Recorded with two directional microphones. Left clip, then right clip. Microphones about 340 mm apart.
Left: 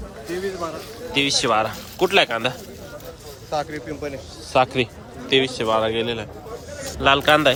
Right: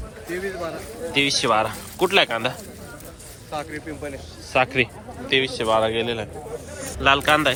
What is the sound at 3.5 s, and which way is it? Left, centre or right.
Speech, left.